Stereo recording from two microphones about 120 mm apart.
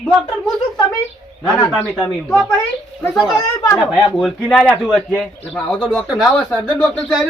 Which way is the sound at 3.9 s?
Centre (ahead or behind).